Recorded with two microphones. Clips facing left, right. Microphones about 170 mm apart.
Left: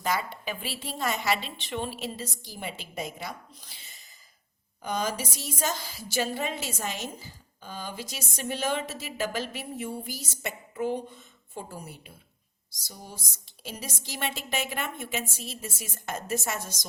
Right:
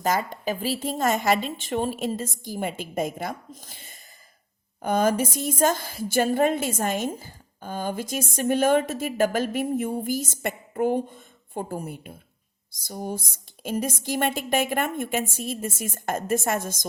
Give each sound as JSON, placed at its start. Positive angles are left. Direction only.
{"t": 0.0, "sound": "a woman's voice", "side_deg": -40}